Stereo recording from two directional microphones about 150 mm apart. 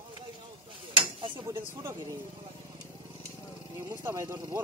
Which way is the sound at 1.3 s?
15° right (ahead or behind).